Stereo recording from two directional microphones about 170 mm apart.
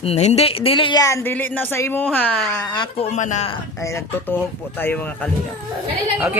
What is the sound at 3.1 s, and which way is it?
Speech, 45° left (ahead or behind).